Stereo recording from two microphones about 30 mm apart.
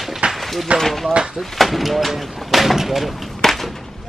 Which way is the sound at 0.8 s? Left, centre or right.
Centre.